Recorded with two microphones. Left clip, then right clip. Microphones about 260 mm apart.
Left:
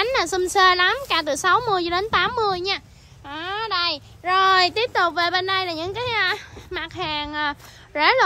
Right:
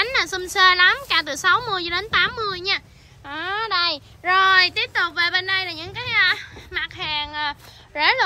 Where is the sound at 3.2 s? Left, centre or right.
Centre.